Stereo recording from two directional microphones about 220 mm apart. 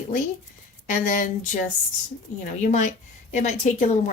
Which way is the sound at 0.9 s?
35° left (ahead or behind).